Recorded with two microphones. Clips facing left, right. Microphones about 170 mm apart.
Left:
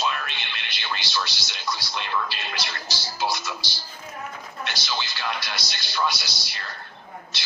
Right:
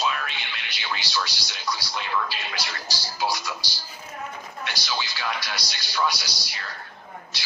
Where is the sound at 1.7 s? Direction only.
10° right (ahead or behind).